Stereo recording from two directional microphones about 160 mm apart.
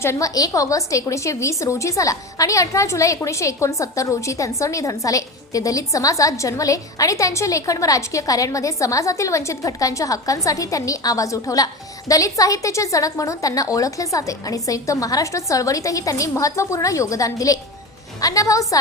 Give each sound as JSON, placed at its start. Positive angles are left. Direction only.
{"t": 0.0, "sound": "a woman's voice", "side_deg": 20}